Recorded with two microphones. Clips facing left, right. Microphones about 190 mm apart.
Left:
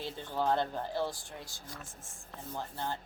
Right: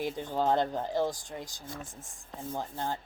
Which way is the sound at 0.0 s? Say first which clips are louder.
Right 4 dB; 15° right (ahead or behind).